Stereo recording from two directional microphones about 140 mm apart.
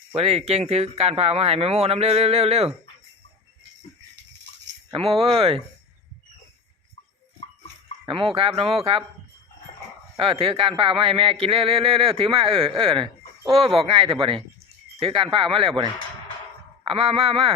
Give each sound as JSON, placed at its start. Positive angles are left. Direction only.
{"t": 0.1, "sound": "speech", "side_deg": -45}
{"t": 4.9, "sound": "speech", "side_deg": -40}
{"t": 8.0, "sound": "speech", "side_deg": -40}
{"t": 10.2, "sound": "speech", "side_deg": -40}
{"t": 16.8, "sound": "speech", "side_deg": -40}